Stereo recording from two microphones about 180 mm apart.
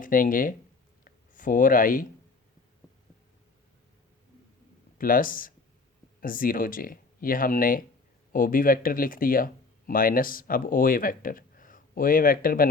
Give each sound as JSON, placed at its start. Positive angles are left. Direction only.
{"t": 0.0, "sound": "speech", "side_deg": 50}
{"t": 4.9, "sound": "speech", "side_deg": 50}